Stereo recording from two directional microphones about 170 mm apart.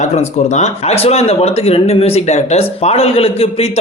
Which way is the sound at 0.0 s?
40° left (ahead or behind).